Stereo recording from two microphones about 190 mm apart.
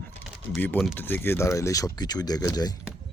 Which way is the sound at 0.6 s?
10° left (ahead or behind).